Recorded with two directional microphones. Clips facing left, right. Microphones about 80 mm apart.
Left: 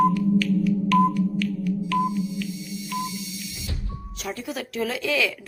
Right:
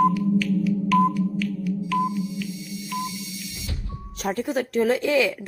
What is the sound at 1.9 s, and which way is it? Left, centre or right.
Telephone dialing, centre.